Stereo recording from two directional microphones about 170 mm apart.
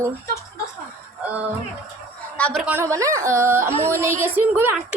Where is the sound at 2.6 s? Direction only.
15° right (ahead or behind).